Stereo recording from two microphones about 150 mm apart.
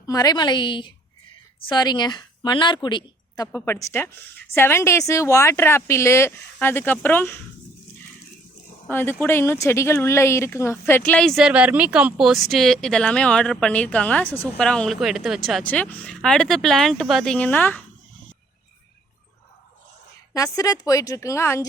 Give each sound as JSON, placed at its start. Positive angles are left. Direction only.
{"t": 0.0, "sound": "a woman's voice", "side_deg": 25}
{"t": 8.9, "sound": "speech", "side_deg": 15}
{"t": 20.3, "sound": "a woman's voice", "side_deg": 25}